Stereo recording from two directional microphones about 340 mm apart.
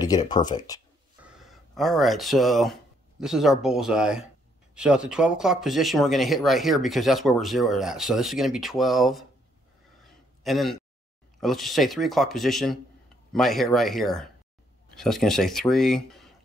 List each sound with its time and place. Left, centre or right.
0.0 s speech: centre
1.2 s speech: centre
10.4 s speech: centre